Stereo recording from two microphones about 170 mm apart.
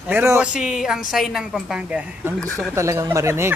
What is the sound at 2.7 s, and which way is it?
Speech, 15° right (ahead or behind).